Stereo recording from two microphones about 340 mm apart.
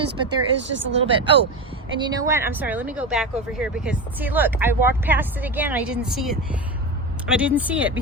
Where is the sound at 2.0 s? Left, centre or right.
Centre.